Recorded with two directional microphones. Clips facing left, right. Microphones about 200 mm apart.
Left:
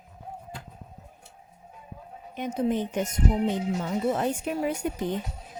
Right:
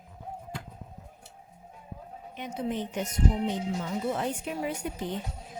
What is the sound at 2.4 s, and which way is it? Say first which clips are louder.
Speech: left 6 dB; 45° left (ahead or behind).